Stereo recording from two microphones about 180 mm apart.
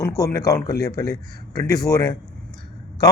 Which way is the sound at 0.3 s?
20° left (ahead or behind).